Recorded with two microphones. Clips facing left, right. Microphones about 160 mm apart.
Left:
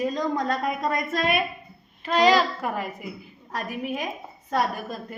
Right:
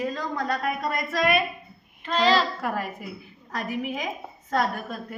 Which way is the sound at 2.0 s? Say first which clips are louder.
Left 2 dB; 10° left (ahead or behind).